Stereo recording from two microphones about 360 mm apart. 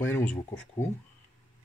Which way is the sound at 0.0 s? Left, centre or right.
Centre.